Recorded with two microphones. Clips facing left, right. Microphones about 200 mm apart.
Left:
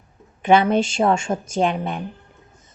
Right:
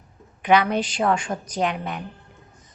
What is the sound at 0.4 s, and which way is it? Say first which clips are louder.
A woman's voice: left 3 dB; 25° left (ahead or behind).